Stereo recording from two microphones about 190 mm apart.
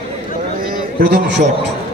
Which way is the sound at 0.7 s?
60° right (ahead or behind).